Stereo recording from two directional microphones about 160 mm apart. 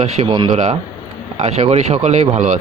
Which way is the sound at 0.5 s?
45° right (ahead or behind).